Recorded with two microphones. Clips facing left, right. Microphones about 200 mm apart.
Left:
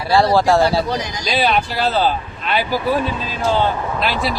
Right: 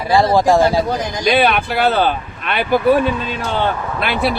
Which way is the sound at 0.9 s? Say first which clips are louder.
Right 5 dB; 50° right (ahead or behind).